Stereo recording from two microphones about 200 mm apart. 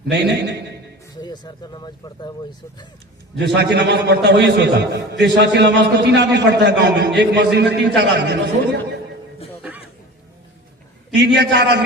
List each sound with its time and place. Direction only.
0.0 s a man's voice: 55° right (ahead or behind)
1.1 s speech: 20° left (ahead or behind)
3.3 s a man's voice: 55° right (ahead or behind)
11.1 s a man's voice: 60° right (ahead or behind)